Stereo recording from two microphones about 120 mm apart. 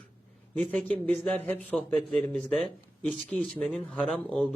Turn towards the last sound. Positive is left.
turn(degrees=5)  # may be behind; listen again after turning